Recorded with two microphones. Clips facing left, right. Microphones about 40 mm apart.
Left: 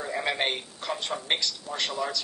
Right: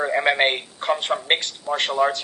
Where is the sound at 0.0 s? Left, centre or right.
Right.